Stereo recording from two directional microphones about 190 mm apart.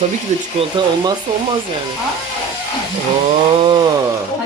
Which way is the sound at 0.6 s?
25° right (ahead or behind).